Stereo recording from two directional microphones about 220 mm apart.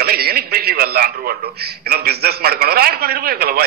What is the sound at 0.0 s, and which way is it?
A man's voice, 45° right (ahead or behind).